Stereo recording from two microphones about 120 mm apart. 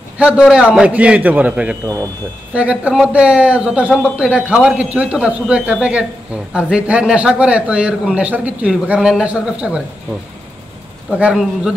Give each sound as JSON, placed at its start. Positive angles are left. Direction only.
{"t": 0.2, "sound": "a man's voice", "side_deg": -10}
{"t": 11.1, "sound": "a man's voice", "side_deg": -10}